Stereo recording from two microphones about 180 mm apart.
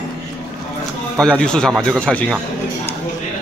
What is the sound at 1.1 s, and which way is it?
Speech, 5° left (ahead or behind).